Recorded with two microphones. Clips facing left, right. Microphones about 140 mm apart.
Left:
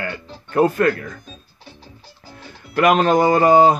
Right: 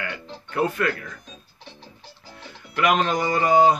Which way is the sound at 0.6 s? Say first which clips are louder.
Left 7 dB; 45° left (ahead or behind).